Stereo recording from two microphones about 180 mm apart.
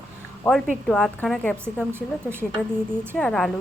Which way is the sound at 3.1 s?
5° left (ahead or behind).